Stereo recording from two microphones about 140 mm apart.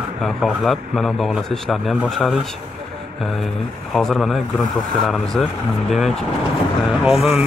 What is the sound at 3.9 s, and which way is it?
Speech, centre (ahead or behind).